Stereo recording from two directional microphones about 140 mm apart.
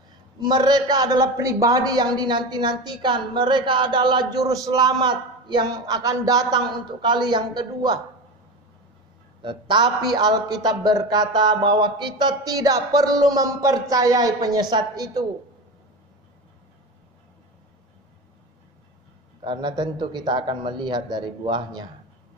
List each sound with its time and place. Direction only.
0.4 s a woman's voice: 30° right (ahead or behind)
9.4 s a man's voice: 35° right (ahead or behind)
19.4 s a woman's voice: 35° right (ahead or behind)